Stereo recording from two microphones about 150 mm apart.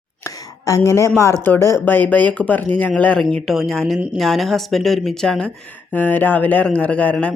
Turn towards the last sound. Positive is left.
turn(degrees=5)  # may be behind; listen again after turning